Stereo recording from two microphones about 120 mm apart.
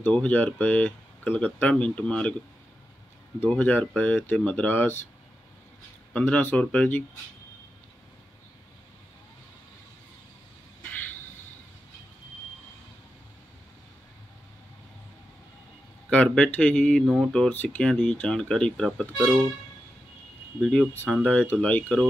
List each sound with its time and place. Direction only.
0.0 s speech: 10° left (ahead or behind)
3.3 s speech: 15° left (ahead or behind)
6.1 s speech: 10° left (ahead or behind)
16.1 s speech: 10° left (ahead or behind)
20.6 s speech: 5° left (ahead or behind)